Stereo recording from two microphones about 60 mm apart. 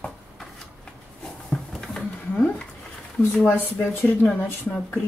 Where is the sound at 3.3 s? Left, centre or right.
Left.